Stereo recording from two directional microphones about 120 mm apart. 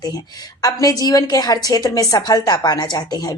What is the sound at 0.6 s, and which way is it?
A woman's voice, 30° left (ahead or behind).